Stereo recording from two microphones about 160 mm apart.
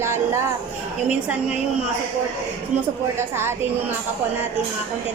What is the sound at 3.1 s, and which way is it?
Speech, 15° right (ahead or behind).